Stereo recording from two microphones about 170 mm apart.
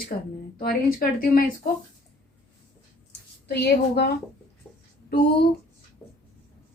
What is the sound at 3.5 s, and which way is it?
Speech, 80° left.